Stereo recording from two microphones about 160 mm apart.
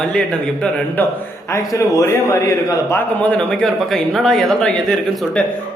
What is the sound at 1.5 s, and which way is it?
A man's voice, 20° left (ahead or behind).